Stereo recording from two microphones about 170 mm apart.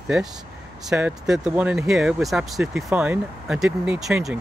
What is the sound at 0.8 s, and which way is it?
Speech, 5° right (ahead or behind).